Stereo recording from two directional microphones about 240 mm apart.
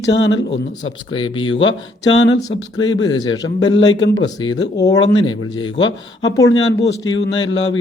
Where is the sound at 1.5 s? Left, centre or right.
Left.